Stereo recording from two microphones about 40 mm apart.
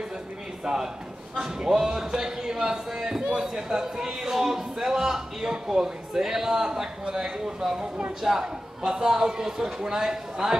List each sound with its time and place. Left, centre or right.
0.7 s a man's voice: centre